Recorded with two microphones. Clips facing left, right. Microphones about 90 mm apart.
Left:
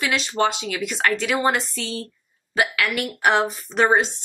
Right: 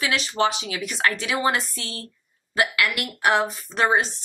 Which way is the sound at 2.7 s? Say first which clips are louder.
Left 1 dB; centre (ahead or behind).